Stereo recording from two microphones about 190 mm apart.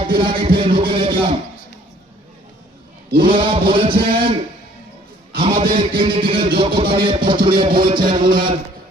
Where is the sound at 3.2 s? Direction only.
25° right (ahead or behind).